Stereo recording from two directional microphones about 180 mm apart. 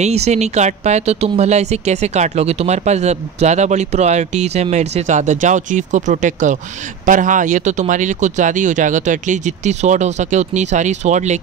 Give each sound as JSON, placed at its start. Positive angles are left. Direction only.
{"t": 0.0, "sound": "speech", "side_deg": -35}